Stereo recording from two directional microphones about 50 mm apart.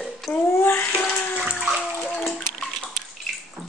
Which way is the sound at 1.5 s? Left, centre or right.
Centre.